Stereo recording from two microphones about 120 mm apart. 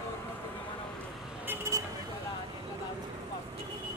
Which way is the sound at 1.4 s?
25° right (ahead or behind).